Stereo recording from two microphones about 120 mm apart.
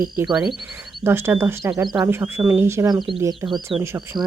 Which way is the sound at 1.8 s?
35° right (ahead or behind).